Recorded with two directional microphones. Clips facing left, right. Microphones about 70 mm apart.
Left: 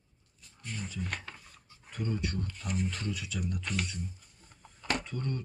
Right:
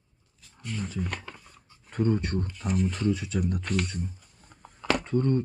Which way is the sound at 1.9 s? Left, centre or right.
Right.